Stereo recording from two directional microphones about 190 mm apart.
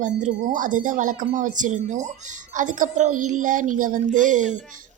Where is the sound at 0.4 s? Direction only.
45° right (ahead or behind).